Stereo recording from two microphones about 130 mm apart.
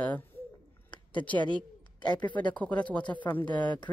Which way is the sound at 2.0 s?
35° left (ahead or behind).